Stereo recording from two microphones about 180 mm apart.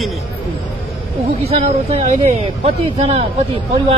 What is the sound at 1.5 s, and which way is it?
Speech, 40° right (ahead or behind).